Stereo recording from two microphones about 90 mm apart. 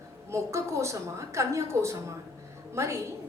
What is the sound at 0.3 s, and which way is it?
A woman's voice, 30° right (ahead or behind).